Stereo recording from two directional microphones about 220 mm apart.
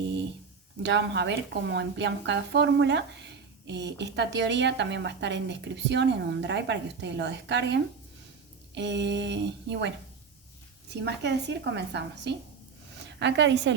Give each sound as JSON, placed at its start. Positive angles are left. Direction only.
{"t": 0.8, "sound": "a woman's voice", "side_deg": -50}
{"t": 11.0, "sound": "a woman's voice", "side_deg": -50}